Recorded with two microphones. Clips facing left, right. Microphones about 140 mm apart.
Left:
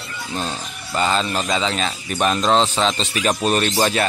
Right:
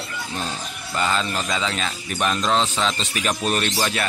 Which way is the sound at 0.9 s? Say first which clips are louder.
Left 3 dB; 25° left (ahead or behind).